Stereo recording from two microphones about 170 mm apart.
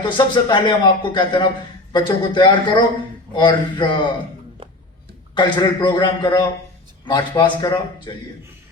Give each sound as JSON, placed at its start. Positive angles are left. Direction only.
{"t": 0.0, "sound": "speech", "side_deg": 25}
{"t": 5.3, "sound": "speech", "side_deg": 25}